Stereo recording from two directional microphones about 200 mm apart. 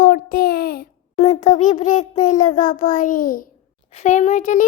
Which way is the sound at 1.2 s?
35° left (ahead or behind).